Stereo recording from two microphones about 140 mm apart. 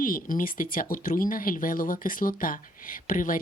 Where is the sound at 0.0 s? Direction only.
75° left (ahead or behind).